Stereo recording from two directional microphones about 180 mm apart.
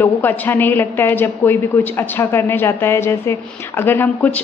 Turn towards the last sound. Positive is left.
turn(degrees=10)  # may be behind; listen again after turning